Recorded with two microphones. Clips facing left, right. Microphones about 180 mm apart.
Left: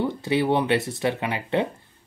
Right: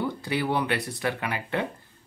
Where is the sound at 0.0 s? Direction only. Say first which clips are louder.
Left 5 dB; 20° left (ahead or behind).